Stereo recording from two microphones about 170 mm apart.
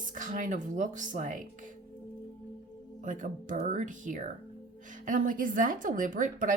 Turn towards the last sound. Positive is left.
turn(degrees=-50)  # may be behind; listen again after turning